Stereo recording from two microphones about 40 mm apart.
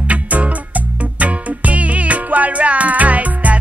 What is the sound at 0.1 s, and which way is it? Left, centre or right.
Music, right.